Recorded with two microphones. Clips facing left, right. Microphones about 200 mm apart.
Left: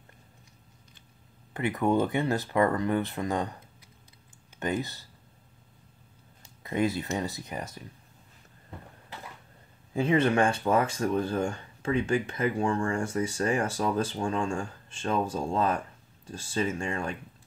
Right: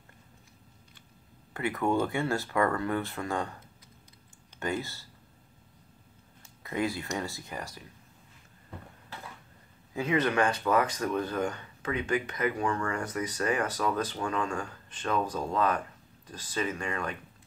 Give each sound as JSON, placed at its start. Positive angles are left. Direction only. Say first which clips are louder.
{"t": 1.5, "sound": "speech", "louder": "left 2 dB", "side_deg": 20}
{"t": 4.6, "sound": "speech", "louder": "left 2 dB", "side_deg": 20}
{"t": 6.6, "sound": "speech", "louder": "left 4 dB", "side_deg": 25}
{"t": 9.9, "sound": "speech", "louder": "left 3 dB", "side_deg": 30}